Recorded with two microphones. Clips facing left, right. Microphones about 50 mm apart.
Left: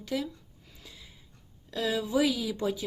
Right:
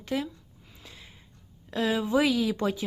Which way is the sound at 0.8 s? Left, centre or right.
Right.